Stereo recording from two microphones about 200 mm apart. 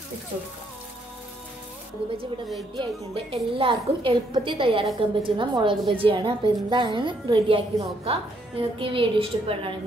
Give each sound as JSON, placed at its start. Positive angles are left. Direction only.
{"t": 2.0, "sound": "a woman's voice", "side_deg": -25}